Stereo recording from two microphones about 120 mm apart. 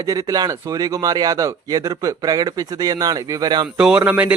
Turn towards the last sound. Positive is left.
turn(degrees=-15)  # may be behind; listen again after turning